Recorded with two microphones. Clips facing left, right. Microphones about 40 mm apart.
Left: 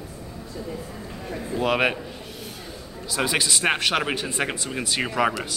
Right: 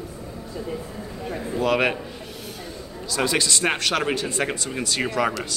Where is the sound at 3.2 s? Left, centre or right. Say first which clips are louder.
Right 1 dB; centre.